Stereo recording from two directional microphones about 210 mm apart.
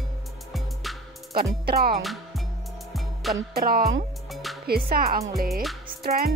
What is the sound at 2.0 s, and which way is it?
Music, centre (ahead or behind).